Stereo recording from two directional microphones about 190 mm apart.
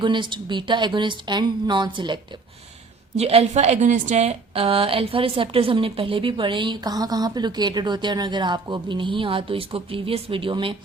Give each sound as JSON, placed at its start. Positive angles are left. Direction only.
{"t": 0.0, "sound": "a woman's voice", "side_deg": -25}
{"t": 3.2, "sound": "a woman's voice", "side_deg": -35}